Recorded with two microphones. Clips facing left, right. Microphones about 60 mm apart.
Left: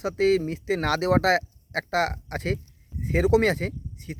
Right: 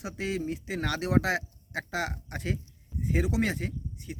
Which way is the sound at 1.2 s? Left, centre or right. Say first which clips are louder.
Left 8 dB; left.